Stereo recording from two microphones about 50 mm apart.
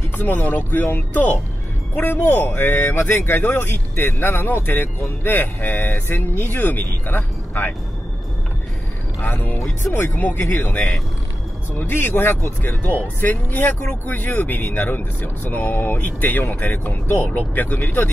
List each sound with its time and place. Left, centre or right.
0.2 s speech: left
9.2 s speech: left